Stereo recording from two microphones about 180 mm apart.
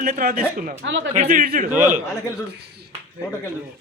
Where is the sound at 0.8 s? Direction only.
90° right.